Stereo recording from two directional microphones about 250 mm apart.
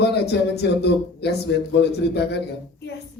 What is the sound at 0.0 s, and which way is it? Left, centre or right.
A man's voice, left.